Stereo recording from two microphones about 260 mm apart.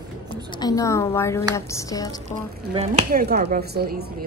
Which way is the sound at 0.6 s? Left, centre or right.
Centre.